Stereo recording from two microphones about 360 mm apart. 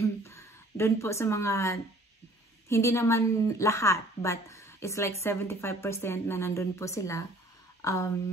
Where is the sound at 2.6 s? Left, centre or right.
Centre.